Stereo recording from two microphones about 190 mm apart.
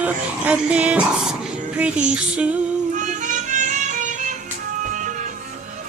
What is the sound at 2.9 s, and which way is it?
Music, 40° right (ahead or behind).